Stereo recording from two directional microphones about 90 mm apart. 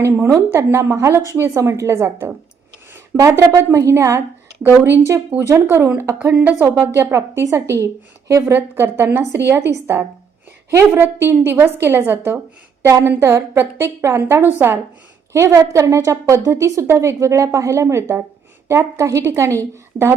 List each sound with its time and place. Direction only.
0.0 s a woman's voice: 30° right (ahead or behind)
8.5 s a woman's voice: 25° right (ahead or behind)